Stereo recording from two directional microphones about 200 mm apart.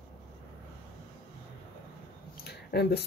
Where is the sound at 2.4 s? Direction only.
55° left (ahead or behind).